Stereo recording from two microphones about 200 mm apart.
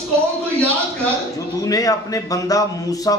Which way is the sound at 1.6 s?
15° left (ahead or behind).